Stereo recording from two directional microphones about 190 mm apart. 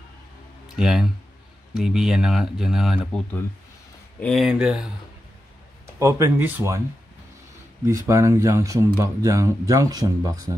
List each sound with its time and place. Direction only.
0.7 s speech: 5° right (ahead or behind)
4.2 s speech: centre (ahead or behind)
5.9 s speech: 15° right (ahead or behind)
7.8 s speech: 15° right (ahead or behind)